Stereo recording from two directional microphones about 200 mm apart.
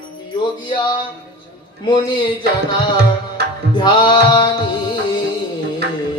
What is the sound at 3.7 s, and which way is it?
Music, 20° left (ahead or behind).